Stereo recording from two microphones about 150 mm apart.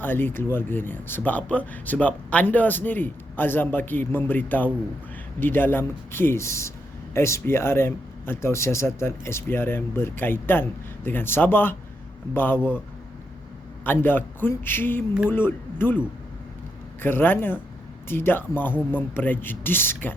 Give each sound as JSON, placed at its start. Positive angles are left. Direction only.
{"t": 0.0, "sound": "a man's voice", "side_deg": 15}
{"t": 13.8, "sound": "a man's voice", "side_deg": 15}
{"t": 17.0, "sound": "a man's voice", "side_deg": 15}